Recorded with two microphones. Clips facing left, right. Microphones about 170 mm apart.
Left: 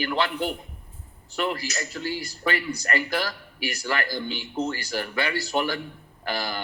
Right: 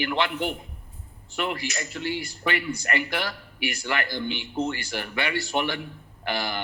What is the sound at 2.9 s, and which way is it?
Speech, 20° right (ahead or behind).